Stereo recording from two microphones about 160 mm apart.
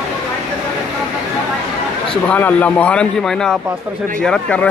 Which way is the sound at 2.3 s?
10° left (ahead or behind).